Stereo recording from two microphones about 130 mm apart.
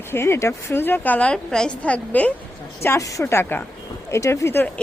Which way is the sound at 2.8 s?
20° left (ahead or behind).